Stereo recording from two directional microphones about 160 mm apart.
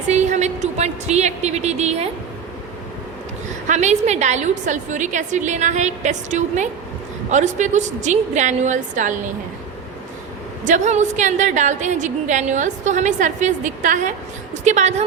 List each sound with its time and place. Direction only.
0.1 s a woman's voice: 45° right (ahead or behind)
3.7 s a woman's voice: 45° right (ahead or behind)
10.6 s a woman's voice: 50° right (ahead or behind)